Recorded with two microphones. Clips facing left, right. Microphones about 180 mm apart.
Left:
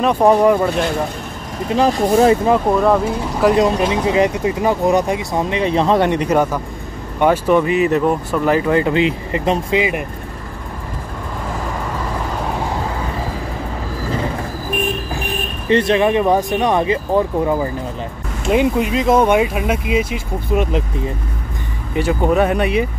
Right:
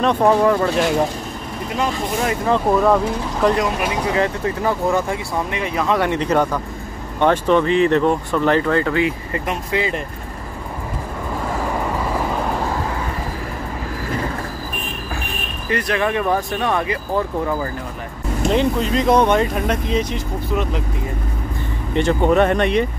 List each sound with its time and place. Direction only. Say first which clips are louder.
0.0 s speech: left 3 dB; 10° left (ahead or behind)
1.8 s speech: left 9 dB; 35° left (ahead or behind)
2.7 s speech: left 1 dB; 5° left (ahead or behind)
3.5 s speech: left 5 dB; 30° left (ahead or behind)
6.2 s speech: left 2 dB; 10° left (ahead or behind)
15.7 s speech: left 6 dB; 25° left (ahead or behind)
18.5 s speech: left 4 dB; 10° left (ahead or behind)
21.9 s speech: even; 5° left (ahead or behind)